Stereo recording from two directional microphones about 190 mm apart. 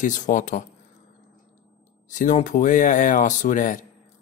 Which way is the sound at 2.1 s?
40° left (ahead or behind).